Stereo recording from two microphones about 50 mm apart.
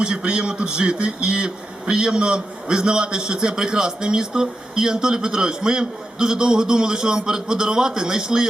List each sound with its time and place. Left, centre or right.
0.0 s a man's voice: centre